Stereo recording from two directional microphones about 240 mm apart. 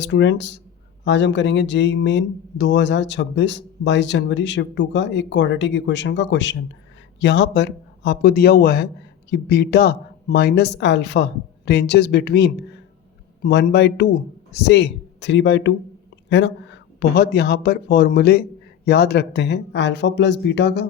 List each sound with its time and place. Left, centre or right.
0.0 s speech: left